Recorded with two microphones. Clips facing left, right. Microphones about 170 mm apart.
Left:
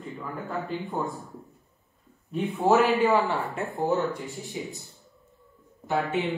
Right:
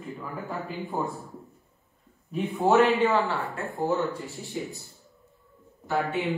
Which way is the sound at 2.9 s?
10° left (ahead or behind).